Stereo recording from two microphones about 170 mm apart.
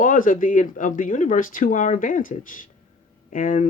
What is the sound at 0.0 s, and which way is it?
Speech, 55° left (ahead or behind).